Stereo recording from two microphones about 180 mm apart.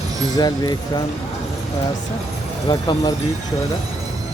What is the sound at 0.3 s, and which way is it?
Speech, 20° left (ahead or behind).